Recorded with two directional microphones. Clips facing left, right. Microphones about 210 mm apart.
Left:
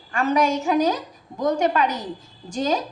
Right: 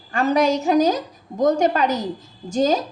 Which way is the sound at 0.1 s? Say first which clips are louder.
Right 2 dB; 35° right (ahead or behind).